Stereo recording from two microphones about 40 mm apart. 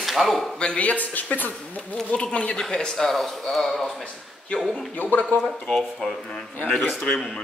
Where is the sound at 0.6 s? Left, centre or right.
Left.